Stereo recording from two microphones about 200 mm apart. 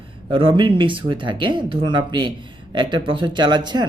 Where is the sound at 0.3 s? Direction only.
25° right (ahead or behind).